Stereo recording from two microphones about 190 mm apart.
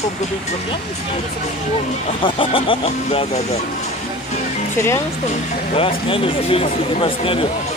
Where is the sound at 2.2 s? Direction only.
30° left (ahead or behind).